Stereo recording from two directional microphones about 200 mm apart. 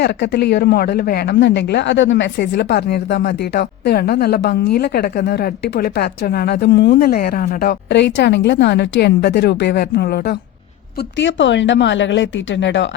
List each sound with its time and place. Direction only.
0.0 s speech: 55° left (ahead or behind)
11.2 s speech: 65° left (ahead or behind)